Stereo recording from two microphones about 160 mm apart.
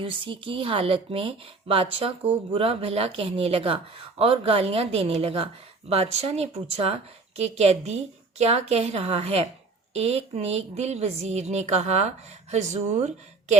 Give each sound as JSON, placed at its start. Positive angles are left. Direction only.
{"t": 0.0, "sound": "a woman's voice", "side_deg": -35}